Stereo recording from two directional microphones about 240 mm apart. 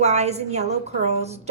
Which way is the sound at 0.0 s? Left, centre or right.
Right.